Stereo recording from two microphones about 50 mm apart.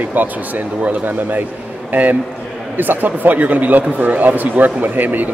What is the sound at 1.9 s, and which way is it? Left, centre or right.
Speech, right.